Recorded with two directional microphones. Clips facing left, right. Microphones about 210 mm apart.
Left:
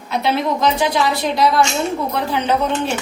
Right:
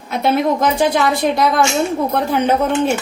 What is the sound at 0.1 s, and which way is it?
A woman's voice, 50° right (ahead or behind).